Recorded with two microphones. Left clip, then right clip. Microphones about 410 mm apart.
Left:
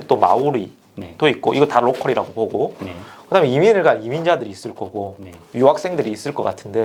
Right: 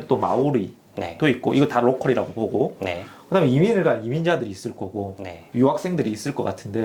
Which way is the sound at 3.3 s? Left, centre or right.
Left.